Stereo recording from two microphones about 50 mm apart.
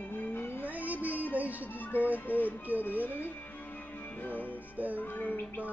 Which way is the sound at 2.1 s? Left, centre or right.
Left.